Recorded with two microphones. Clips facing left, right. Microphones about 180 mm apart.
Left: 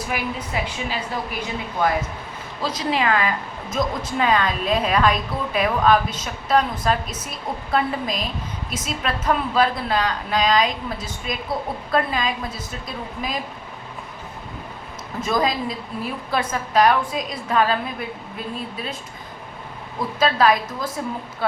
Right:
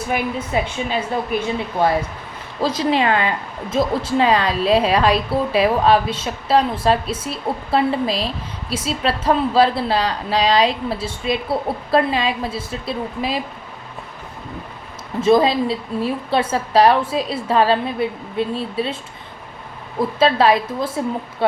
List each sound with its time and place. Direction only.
0.5 s a woman's voice: 25° right (ahead or behind)
15.2 s a woman's voice: 30° right (ahead or behind)
20.0 s a woman's voice: 30° right (ahead or behind)